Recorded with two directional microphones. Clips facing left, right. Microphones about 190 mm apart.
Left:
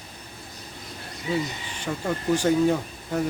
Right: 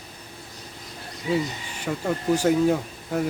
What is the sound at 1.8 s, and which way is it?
Speech, 5° right (ahead or behind).